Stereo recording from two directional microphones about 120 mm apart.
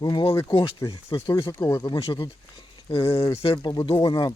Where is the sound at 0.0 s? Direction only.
40° left (ahead or behind).